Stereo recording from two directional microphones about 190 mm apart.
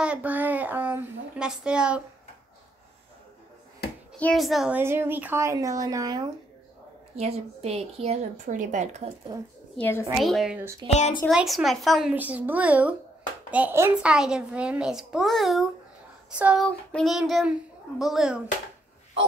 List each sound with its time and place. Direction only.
0.0 s speech: 5° right (ahead or behind)
4.2 s speech: centre (ahead or behind); by 6.3 s 20° right (ahead or behind)
7.2 s a woman's voice: 35° right (ahead or behind)
9.8 s a woman's voice: 10° left (ahead or behind)
10.1 s a child's voice: centre (ahead or behind)
10.9 s speech: 35° left (ahead or behind)
11.2 s a child's voice: centre (ahead or behind)